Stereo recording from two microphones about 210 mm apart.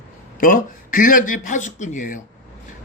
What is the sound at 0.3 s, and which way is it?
Speech, 40° left (ahead or behind).